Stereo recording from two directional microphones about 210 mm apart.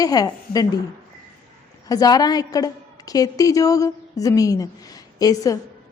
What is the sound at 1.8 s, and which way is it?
A woman's voice, 20° left (ahead or behind).